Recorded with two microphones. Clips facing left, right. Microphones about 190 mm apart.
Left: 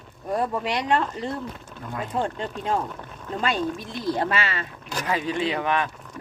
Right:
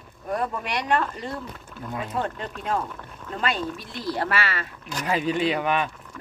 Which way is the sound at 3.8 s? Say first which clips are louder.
Left 3 dB; 20° left (ahead or behind).